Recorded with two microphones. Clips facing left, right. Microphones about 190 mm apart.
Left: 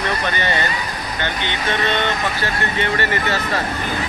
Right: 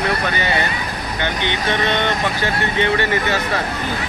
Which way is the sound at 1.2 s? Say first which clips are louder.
Right 2 dB; 15° right (ahead or behind).